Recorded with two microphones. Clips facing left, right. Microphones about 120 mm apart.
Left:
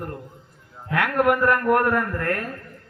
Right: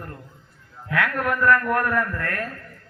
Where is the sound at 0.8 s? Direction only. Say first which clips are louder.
Left 4 dB; 30° left (ahead or behind).